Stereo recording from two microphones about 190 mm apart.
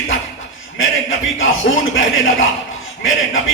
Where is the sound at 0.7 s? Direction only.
90° left.